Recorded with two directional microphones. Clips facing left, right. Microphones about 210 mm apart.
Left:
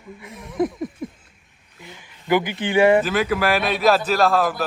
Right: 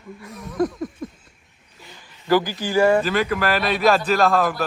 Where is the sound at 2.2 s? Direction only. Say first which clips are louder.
Right 1 dB; 20° left (ahead or behind).